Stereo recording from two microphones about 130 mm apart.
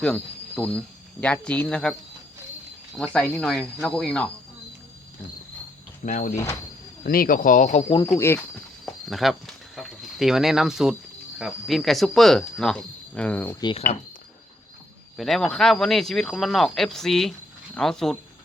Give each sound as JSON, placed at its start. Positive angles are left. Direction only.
{"t": 0.0, "sound": "speech", "side_deg": 10}
{"t": 6.1, "sound": "speech", "side_deg": 90}
{"t": 6.3, "sound": "speech", "side_deg": 20}
{"t": 7.0, "sound": "speech", "side_deg": 90}
{"t": 7.9, "sound": "speech", "side_deg": 35}
{"t": 8.2, "sound": "speech", "side_deg": 20}
{"t": 9.0, "sound": "speech", "side_deg": 0}
{"t": 15.2, "sound": "speech", "side_deg": 0}